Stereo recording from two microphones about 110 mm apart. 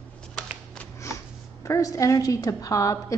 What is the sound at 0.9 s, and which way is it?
A woman's voice, 25° left (ahead or behind).